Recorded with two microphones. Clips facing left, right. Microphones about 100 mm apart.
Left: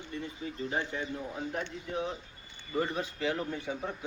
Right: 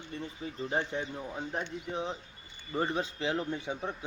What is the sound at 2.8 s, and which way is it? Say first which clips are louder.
Speech: even; 25° right (ahead or behind).